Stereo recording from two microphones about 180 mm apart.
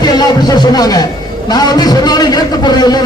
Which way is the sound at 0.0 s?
20° left (ahead or behind).